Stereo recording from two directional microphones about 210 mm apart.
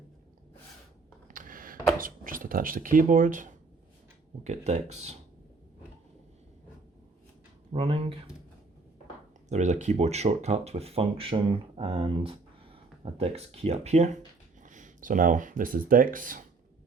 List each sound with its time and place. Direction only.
1.3 s speech: 40° right (ahead or behind)
7.7 s speech: 30° right (ahead or behind)
9.5 s speech: 35° right (ahead or behind)